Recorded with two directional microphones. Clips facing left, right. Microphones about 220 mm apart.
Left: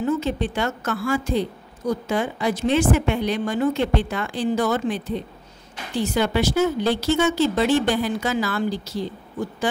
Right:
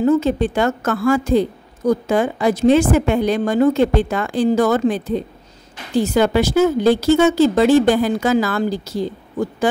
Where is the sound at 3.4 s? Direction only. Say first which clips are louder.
Right 8 dB; 45° right (ahead or behind).